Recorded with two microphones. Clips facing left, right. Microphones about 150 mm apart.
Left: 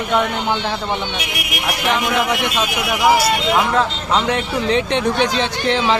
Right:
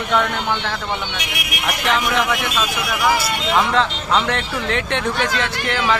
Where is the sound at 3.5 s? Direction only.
10° left (ahead or behind).